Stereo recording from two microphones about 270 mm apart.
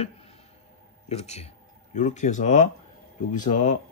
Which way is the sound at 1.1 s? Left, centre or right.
Left.